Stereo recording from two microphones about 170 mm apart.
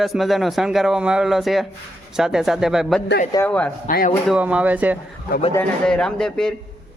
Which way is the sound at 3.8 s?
55° left (ahead or behind).